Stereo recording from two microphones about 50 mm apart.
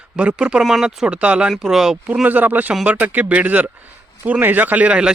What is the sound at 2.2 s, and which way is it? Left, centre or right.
Speech, right.